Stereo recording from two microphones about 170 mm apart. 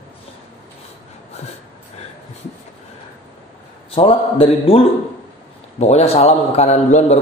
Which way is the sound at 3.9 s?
35° left (ahead or behind).